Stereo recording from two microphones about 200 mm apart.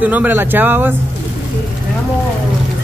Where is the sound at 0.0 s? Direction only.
10° right (ahead or behind).